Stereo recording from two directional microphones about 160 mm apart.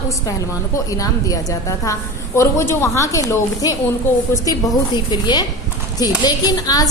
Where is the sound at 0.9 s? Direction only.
20° left (ahead or behind).